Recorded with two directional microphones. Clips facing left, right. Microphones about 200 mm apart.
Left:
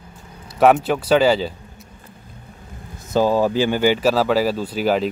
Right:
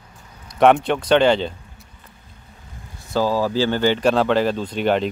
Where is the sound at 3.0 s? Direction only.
20° left (ahead or behind).